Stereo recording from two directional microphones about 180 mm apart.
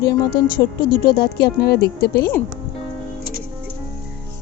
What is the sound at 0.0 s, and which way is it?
Speech, 55° left (ahead or behind).